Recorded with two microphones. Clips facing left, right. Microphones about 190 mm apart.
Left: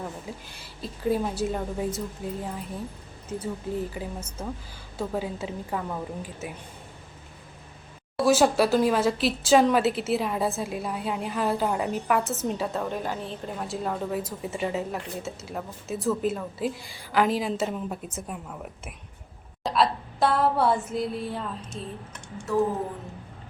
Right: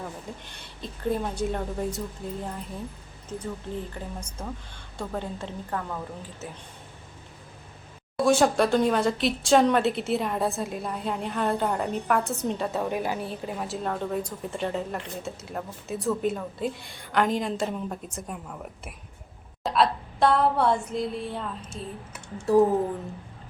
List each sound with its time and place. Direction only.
0.0 s speech: 5° left (ahead or behind)
8.2 s speech: 5° left (ahead or behind)
22.5 s speech: 35° right (ahead or behind)